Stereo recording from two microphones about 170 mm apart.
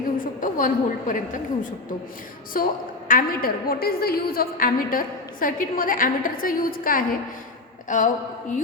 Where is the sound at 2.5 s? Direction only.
55° left (ahead or behind).